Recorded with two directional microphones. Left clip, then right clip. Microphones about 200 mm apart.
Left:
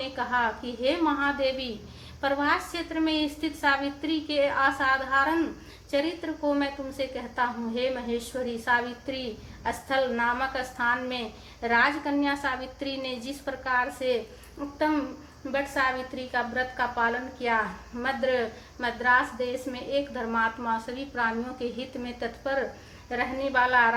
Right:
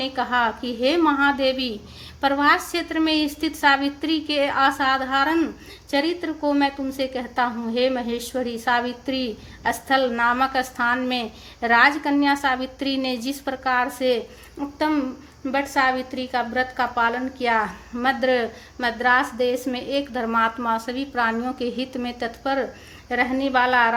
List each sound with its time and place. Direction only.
0.0 s a woman's voice: 50° right (ahead or behind)